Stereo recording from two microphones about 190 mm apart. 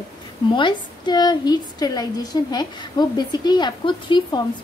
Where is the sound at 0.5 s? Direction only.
25° left (ahead or behind).